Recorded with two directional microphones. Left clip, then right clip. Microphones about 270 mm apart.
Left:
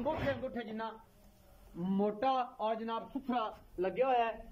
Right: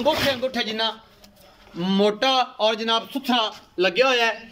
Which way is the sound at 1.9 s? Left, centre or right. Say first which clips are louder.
Right 13 dB; right.